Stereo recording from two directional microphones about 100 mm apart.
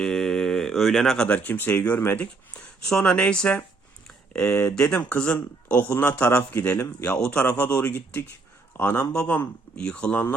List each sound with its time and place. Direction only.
0.0 s a man's voice: 5° left (ahead or behind)